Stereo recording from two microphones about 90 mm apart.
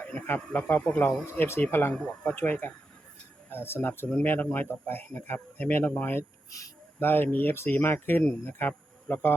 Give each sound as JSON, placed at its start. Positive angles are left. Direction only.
{"t": 0.0, "sound": "speech", "side_deg": 15}